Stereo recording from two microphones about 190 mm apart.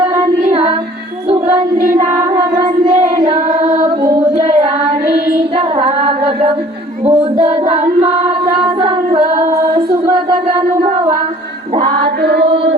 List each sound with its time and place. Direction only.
0.4 s music: 35° right (ahead or behind)
1.8 s a sound: 35° right (ahead or behind)
2.3 s child singing: 20° right (ahead or behind)
3.2 s singing: 25° right (ahead or behind)
5.5 s female singing: 30° right (ahead or behind)
7.0 s a sound: 25° right (ahead or behind)
7.3 s child singing: 40° right (ahead or behind)
8.8 s singing: 30° right (ahead or behind)
12.2 s mantra: 60° right (ahead or behind)